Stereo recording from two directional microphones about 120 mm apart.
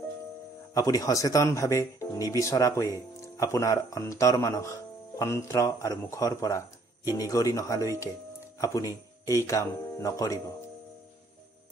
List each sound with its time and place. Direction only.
0.7 s speech: 30° left (ahead or behind)